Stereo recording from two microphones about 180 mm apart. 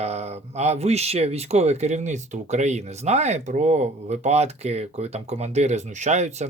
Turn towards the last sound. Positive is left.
turn(degrees=-40)  # may be behind; listen again after turning